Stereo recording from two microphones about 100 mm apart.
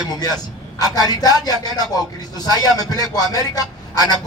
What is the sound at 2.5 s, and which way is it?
A man's voice, 40° left (ahead or behind).